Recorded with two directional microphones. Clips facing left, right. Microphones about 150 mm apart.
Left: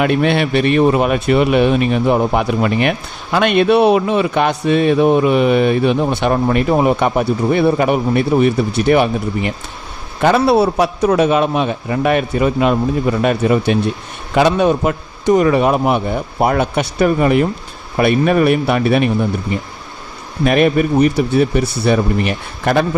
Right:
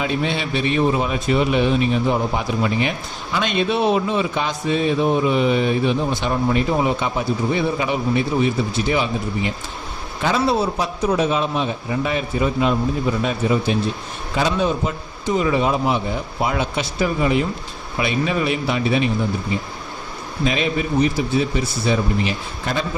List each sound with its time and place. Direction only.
0.0 s a man's voice: 65° left (ahead or behind)